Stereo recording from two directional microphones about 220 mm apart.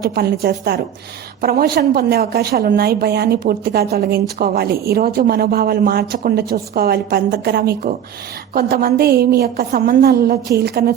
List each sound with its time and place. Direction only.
0.1 s a woman's voice: 45° right (ahead or behind)